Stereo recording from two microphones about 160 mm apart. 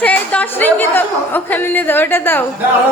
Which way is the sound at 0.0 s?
10° left (ahead or behind).